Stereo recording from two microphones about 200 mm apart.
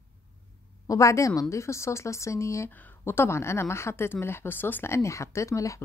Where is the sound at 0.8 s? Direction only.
15° left (ahead or behind).